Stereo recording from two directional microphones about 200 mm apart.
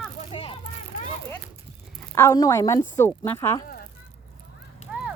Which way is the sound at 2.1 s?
15° left (ahead or behind).